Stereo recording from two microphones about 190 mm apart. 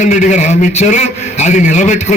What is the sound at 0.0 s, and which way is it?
A man's voice, 40° left (ahead or behind).